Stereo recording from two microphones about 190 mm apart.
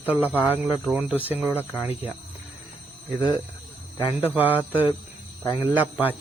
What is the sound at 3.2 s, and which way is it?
Speech, 25° left (ahead or behind).